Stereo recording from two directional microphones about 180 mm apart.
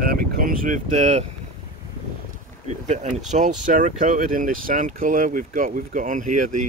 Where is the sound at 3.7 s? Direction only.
45° right (ahead or behind).